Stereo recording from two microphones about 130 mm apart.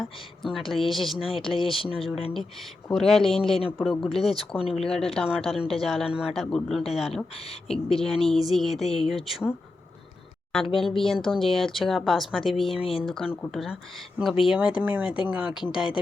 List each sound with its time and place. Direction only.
0.0 s speech: centre (ahead or behind)
1.5 s speech: 45° left (ahead or behind)
1.9 s speech: centre (ahead or behind)
10.5 s speech: centre (ahead or behind)
12.8 s speech: 45° left (ahead or behind)
13.1 s speech: 5° left (ahead or behind)